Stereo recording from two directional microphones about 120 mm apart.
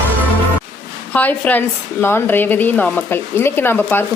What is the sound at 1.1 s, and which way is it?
A woman's voice, 15° left (ahead or behind).